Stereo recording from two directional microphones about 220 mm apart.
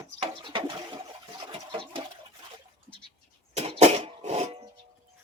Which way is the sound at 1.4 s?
20° right (ahead or behind).